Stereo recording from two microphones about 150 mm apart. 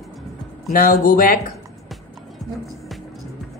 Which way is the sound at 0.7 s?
70° left (ahead or behind).